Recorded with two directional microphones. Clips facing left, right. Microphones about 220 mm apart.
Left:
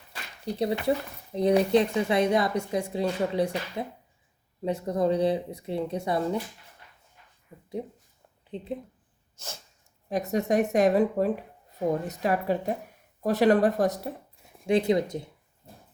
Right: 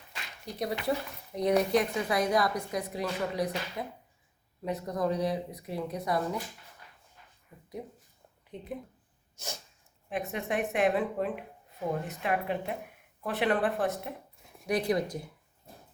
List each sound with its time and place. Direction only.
0.4 s speech: 25° left (ahead or behind)
8.4 s speech: 30° left (ahead or behind)
10.1 s speech: 40° left (ahead or behind)
14.7 s speech: 25° left (ahead or behind)